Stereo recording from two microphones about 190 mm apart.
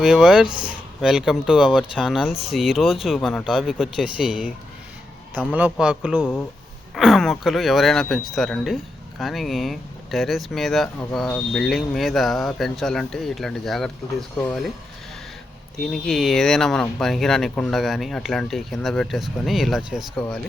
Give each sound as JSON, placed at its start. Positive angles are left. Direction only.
{"t": 0.0, "sound": "a man's voice", "side_deg": -5}
{"t": 15.8, "sound": "speech", "side_deg": 0}